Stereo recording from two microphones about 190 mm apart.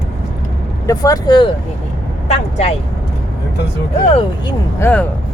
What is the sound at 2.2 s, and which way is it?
Vehicle, 35° left (ahead or behind).